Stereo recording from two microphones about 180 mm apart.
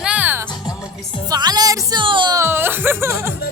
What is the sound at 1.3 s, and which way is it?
Speech, 20° right (ahead or behind).